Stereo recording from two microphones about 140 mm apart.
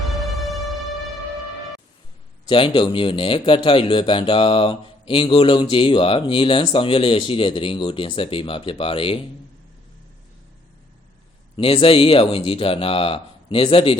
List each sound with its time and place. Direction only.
0.3 s music: centre (ahead or behind)
2.5 s speech: 35° left (ahead or behind)
11.5 s speech: 40° left (ahead or behind)